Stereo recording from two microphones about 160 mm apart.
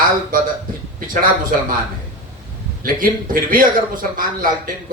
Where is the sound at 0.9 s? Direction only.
60° right (ahead or behind).